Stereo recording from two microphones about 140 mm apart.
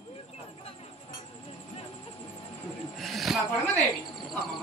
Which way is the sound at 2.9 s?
Centre (ahead or behind).